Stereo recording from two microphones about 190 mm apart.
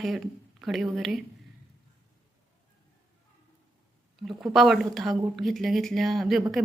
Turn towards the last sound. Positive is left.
turn(degrees=0)  # may be behind; listen again after turning